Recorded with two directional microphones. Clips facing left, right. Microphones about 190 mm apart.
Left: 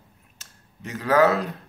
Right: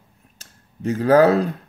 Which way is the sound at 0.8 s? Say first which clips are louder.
Right 5 dB; 35° right (ahead or behind).